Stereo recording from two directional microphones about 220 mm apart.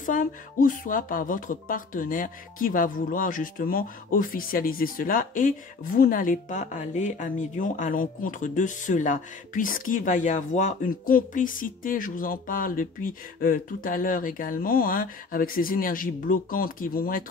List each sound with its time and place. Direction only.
0.0 s speech: 35° left (ahead or behind)